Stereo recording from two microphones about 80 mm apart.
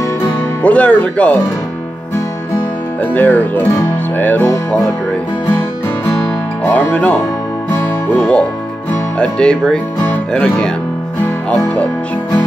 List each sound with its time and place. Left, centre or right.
0.6 s speech: centre
3.0 s music: left
6.6 s music: centre
8.1 s speech: centre